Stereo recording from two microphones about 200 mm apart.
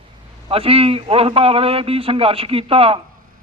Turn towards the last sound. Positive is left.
turn(degrees=-30)  # may be behind; listen again after turning